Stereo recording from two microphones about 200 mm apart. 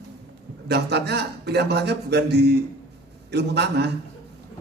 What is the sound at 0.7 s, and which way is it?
A man's voice, 55° right (ahead or behind).